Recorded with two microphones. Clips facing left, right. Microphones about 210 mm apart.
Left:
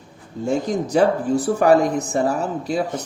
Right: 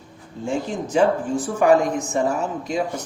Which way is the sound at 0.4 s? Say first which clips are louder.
Left 4 dB; 40° left (ahead or behind).